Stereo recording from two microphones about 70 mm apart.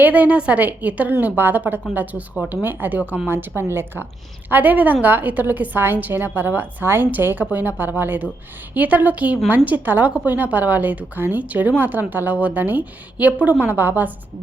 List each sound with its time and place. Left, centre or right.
0.0 s a woman's voice: right